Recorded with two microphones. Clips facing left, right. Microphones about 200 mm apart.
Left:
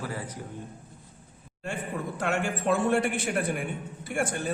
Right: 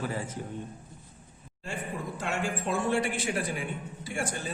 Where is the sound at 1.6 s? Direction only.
60° left (ahead or behind).